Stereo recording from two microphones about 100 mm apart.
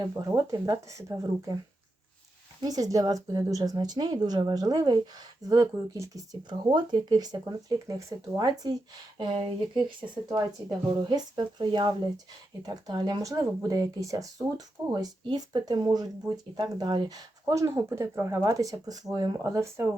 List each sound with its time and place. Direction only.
0.0 s a woman's voice: 35° right (ahead or behind)
2.6 s a woman's voice: 40° right (ahead or behind)
6.5 s a woman's voice: 50° right (ahead or behind)
9.1 s speech: 60° right (ahead or behind)
10.2 s a woman's voice: 40° right (ahead or behind)